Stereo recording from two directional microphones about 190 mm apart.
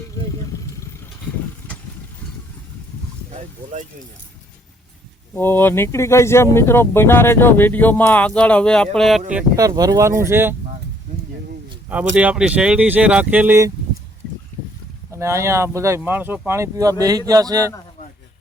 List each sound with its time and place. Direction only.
5.3 s speech: 10° left (ahead or behind)
9.6 s speech: 20° right (ahead or behind)
12.1 s speech: 5° right (ahead or behind)
15.1 s speech: 15° right (ahead or behind)